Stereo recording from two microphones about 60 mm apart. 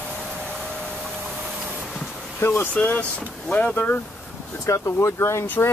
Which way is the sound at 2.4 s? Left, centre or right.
Left.